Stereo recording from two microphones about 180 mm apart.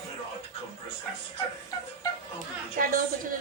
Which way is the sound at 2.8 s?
50° right (ahead or behind).